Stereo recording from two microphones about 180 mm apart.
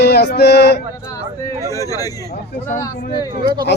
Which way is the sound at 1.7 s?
20° left (ahead or behind).